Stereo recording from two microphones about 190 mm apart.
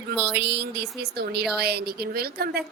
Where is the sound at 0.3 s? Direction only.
60° right (ahead or behind).